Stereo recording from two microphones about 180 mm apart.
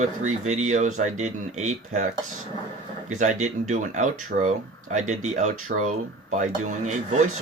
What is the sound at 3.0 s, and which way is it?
Speech, 40° right (ahead or behind).